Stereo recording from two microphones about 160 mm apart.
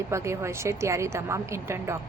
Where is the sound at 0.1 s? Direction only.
15° right (ahead or behind).